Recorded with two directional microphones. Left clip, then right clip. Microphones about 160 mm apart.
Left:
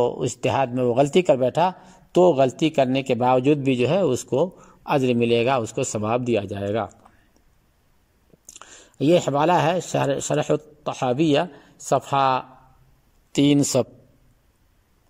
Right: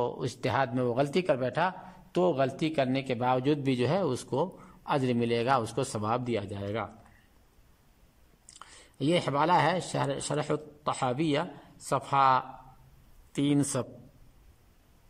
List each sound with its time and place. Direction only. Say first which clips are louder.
0.0 s a man's voice: left 9 dB; 15° left (ahead or behind)
8.5 s a man's voice: left 9 dB; 10° left (ahead or behind)
13.3 s speech: left 10 dB; 25° left (ahead or behind)